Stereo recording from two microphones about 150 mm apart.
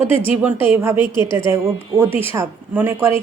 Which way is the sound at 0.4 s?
15° right (ahead or behind).